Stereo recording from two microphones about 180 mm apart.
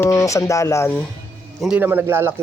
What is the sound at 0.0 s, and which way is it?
Speech, 15° left (ahead or behind).